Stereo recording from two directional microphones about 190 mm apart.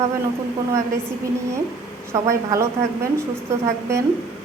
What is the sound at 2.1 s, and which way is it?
A woman's voice, 15° right (ahead or behind).